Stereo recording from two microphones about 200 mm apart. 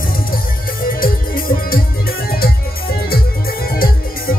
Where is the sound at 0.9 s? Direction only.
45° left (ahead or behind).